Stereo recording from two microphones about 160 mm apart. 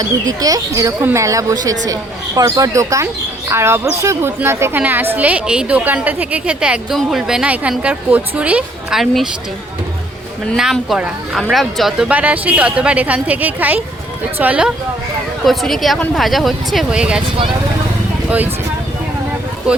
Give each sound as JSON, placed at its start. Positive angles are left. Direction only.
{"t": 0.0, "sound": "speech", "side_deg": -20}
{"t": 10.5, "sound": "speech", "side_deg": 0}
{"t": 19.7, "sound": "speech", "side_deg": -5}